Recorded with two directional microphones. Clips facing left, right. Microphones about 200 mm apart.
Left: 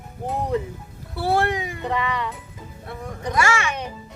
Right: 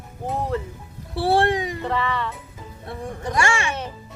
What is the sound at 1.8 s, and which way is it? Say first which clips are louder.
Speech: left 2 dB; 15° left (ahead or behind).